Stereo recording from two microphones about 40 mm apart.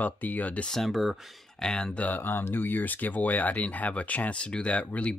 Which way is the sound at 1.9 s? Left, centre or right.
Left.